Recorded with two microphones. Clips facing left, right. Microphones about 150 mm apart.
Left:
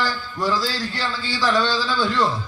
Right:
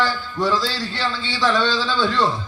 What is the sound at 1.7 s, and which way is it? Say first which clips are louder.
Speech: right 1 dB; 25° right (ahead or behind).